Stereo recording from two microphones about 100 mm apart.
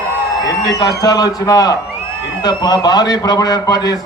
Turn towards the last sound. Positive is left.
turn(degrees=40)  # may be behind; listen again after turning